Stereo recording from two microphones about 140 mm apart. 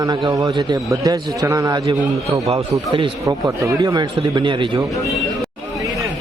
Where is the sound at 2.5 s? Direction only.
40° right (ahead or behind).